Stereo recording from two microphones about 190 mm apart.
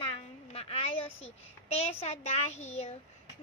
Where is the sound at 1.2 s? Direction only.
35° left (ahead or behind).